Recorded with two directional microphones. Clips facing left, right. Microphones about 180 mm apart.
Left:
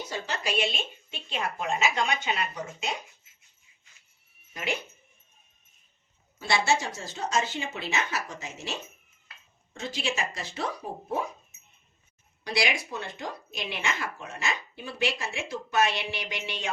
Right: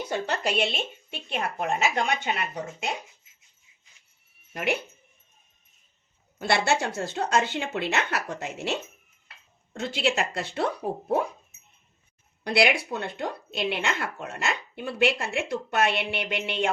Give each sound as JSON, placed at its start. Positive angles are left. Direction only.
{"t": 0.1, "sound": "speech", "side_deg": -60}
{"t": 4.5, "sound": "speech", "side_deg": -60}
{"t": 6.4, "sound": "speech", "side_deg": -60}
{"t": 12.5, "sound": "speech", "side_deg": -60}